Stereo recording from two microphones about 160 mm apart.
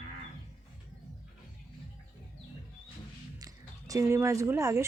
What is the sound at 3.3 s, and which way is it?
Speech, 20° right (ahead or behind).